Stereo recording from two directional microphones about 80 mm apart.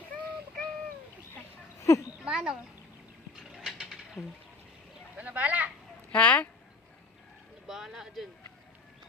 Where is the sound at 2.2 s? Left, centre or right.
Centre.